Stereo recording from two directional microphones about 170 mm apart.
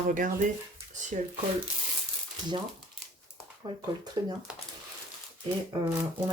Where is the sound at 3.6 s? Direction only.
25° right (ahead or behind).